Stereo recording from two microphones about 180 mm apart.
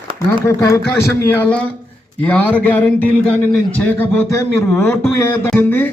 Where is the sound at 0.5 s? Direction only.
15° left (ahead or behind).